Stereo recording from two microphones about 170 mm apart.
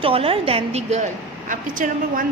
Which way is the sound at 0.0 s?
35° right (ahead or behind).